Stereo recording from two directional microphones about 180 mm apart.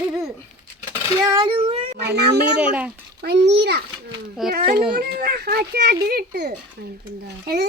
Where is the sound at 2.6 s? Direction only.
10° right (ahead or behind).